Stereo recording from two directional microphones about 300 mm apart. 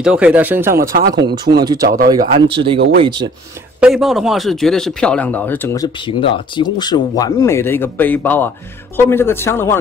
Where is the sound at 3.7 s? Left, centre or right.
Centre.